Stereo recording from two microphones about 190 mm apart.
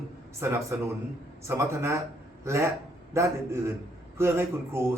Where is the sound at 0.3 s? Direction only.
15° right (ahead or behind).